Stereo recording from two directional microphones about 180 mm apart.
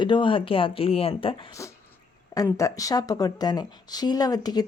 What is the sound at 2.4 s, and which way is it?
Speech, 15° left (ahead or behind).